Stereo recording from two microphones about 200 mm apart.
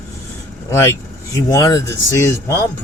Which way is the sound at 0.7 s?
15° left (ahead or behind).